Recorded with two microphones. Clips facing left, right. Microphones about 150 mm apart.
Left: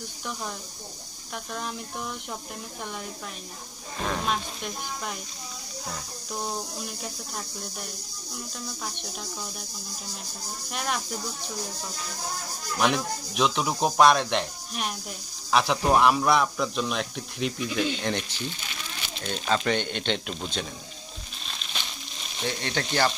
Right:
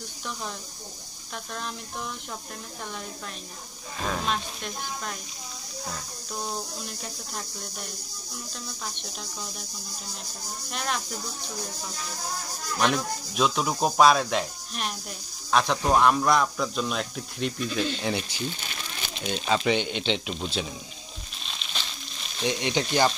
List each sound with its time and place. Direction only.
4.0 s speech: centre (ahead or behind)
6.8 s speech: 5° left (ahead or behind)
8.8 s speech: centre (ahead or behind)
10.7 s speech: 5° left (ahead or behind)
12.7 s speech: centre (ahead or behind)
18.0 s speech: 10° right (ahead or behind)
22.4 s speech: 15° right (ahead or behind)